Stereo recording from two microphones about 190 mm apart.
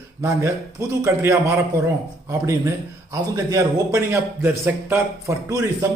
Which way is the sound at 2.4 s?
15° right (ahead or behind).